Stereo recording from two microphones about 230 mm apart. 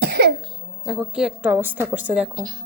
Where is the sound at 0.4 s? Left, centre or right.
Centre.